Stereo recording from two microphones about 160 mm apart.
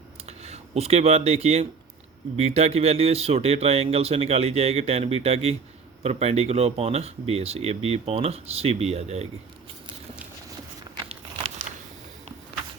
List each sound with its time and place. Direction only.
0.3 s speech: 40° right (ahead or behind)